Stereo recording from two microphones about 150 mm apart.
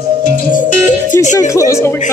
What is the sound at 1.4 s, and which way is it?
Speech, 20° left (ahead or behind).